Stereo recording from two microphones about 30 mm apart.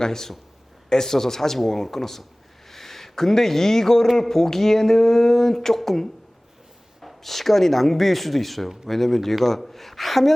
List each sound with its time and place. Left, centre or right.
0.0 s speech: centre